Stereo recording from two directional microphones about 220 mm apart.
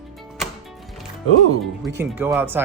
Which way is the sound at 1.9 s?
10° right (ahead or behind).